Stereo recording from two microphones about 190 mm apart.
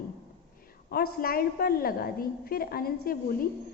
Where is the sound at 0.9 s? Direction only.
50° left (ahead or behind).